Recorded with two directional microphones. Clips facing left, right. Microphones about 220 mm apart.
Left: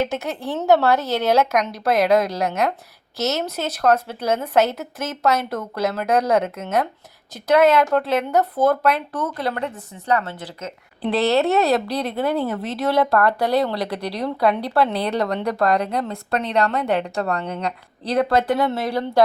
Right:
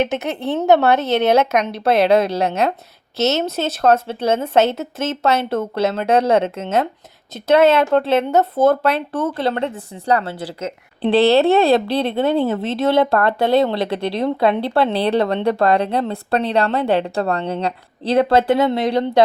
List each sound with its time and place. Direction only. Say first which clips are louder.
0.0 s a woman's voice: right 4 dB; 20° right (ahead or behind)